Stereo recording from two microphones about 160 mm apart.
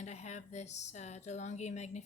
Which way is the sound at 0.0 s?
45° left (ahead or behind).